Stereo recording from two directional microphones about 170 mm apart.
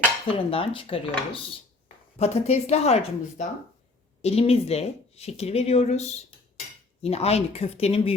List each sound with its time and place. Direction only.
0.3 s speech: 30° left (ahead or behind)